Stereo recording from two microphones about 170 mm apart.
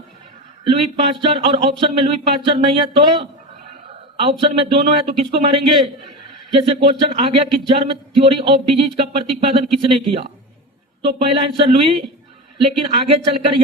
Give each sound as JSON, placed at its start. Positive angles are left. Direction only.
{"t": 0.6, "sound": "speech", "side_deg": -30}